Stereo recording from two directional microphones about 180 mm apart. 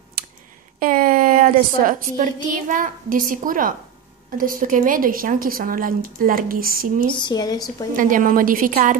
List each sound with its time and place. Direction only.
0.7 s a woman's voice: 50° right (ahead or behind)
7.1 s speech: 25° left (ahead or behind)
7.9 s a woman's voice: 50° right (ahead or behind)